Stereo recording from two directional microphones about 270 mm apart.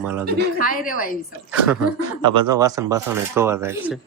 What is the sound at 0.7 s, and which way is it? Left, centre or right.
Speech, left.